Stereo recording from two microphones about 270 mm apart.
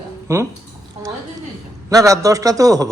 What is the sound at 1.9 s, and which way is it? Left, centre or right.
A man's voice, centre.